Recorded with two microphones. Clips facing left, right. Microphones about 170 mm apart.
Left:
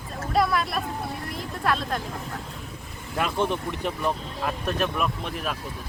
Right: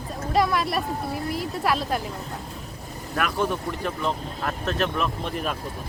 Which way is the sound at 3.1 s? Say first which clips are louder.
Even; 25° left (ahead or behind).